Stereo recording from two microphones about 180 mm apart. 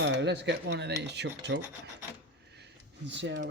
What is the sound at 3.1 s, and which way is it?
Speech, 80° right.